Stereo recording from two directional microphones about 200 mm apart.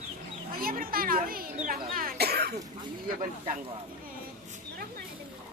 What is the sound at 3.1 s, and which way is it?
Speech, 40° right (ahead or behind).